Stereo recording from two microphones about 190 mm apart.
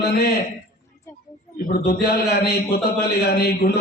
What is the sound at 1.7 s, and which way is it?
Speech, 55° left (ahead or behind).